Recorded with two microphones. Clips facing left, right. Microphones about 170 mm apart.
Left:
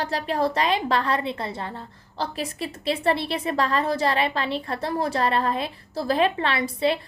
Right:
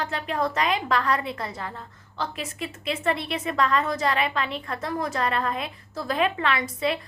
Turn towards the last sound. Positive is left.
turn(degrees=30)  # may be behind; listen again after turning